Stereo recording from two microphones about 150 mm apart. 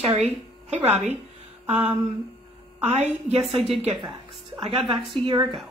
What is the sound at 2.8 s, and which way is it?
A woman's voice, 45° right (ahead or behind).